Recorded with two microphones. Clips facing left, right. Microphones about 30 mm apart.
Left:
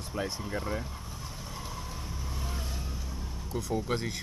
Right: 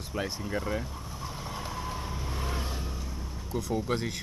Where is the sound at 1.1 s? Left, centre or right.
Centre.